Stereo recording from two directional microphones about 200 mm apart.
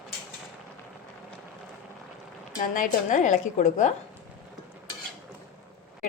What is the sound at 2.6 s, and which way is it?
A woman's voice, 40° left (ahead or behind).